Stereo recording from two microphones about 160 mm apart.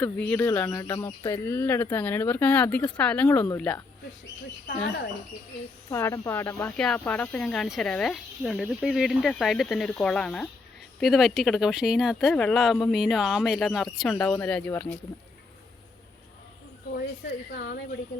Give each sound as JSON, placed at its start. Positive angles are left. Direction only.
{"t": 0.0, "sound": "speech", "side_deg": 10}
{"t": 5.9, "sound": "speech", "side_deg": 15}
{"t": 16.9, "sound": "a woman's voice", "side_deg": 85}